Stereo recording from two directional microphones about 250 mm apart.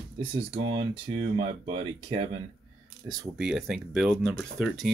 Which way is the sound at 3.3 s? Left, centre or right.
Centre.